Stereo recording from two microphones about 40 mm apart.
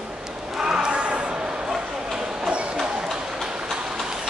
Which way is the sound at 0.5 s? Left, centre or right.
Centre.